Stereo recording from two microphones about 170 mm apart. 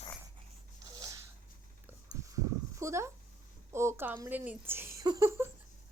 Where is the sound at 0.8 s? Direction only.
25° right (ahead or behind).